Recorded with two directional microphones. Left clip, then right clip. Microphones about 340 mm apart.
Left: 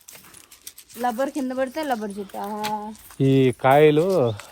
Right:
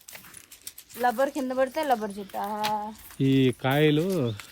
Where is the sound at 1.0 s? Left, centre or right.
Right.